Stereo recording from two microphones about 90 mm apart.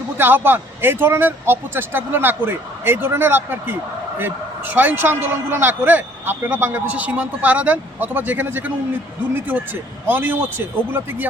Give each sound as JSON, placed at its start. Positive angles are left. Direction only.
{"t": 0.2, "sound": "a man's voice", "side_deg": -20}